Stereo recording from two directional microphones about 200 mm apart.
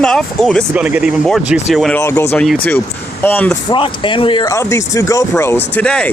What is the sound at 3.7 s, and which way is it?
Speech, 25° left (ahead or behind).